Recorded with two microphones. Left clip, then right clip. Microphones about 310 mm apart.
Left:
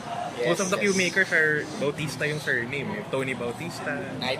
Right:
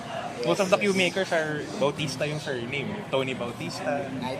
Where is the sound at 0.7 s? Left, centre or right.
Centre.